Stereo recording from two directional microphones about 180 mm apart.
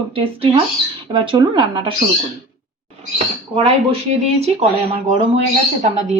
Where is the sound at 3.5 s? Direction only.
35° right (ahead or behind).